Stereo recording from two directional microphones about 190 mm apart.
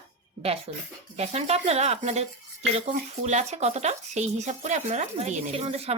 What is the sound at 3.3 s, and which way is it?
Speech, 35° right (ahead or behind).